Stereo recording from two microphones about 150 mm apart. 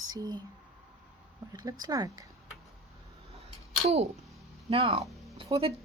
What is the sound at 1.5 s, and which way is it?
Speech, 25° right (ahead or behind).